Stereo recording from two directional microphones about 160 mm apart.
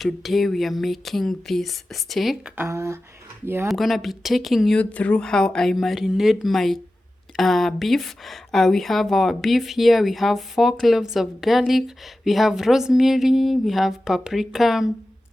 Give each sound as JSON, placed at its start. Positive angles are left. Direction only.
{"t": 0.0, "sound": "a woman's voice", "side_deg": 0}
{"t": 2.6, "sound": "speech", "side_deg": -20}
{"t": 3.7, "sound": "a woman's voice", "side_deg": 0}